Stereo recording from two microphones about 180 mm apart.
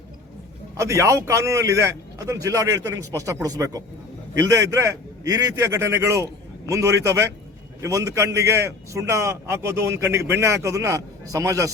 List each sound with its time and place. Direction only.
0.8 s a man's voice: 15° right (ahead or behind)